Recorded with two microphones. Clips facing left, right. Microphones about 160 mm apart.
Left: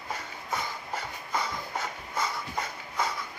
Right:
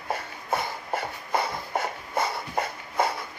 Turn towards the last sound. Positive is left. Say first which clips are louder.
# right 5 dB
turn(degrees=-60)  # may be behind; listen again after turning